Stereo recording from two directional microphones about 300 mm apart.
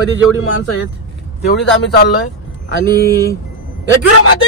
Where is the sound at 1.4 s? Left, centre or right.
Left.